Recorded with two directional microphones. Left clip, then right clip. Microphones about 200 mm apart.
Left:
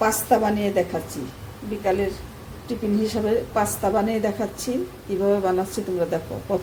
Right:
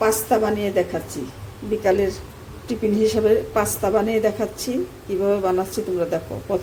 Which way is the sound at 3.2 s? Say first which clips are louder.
Right 3 dB; 10° right (ahead or behind).